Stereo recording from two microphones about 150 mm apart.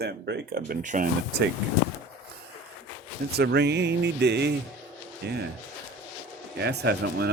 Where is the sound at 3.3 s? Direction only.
90° right.